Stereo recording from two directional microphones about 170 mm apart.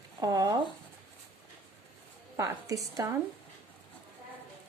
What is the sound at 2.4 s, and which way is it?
Speech, 20° right (ahead or behind).